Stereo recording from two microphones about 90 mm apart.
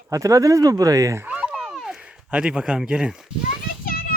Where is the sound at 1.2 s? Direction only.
15° right (ahead or behind).